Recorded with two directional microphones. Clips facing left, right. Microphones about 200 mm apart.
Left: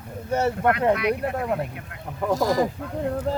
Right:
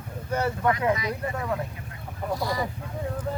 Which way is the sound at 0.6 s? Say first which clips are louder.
Left 4 dB; 65° left (ahead or behind).